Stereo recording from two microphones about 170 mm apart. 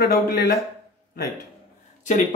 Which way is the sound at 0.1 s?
60° left (ahead or behind).